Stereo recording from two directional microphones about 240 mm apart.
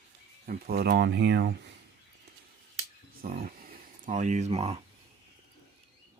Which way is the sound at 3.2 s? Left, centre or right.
Right.